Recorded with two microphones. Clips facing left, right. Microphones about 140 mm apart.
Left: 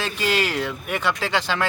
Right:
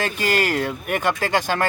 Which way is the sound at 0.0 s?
45° right (ahead or behind).